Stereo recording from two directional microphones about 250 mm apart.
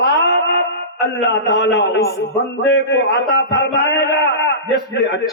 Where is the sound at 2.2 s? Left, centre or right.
Left.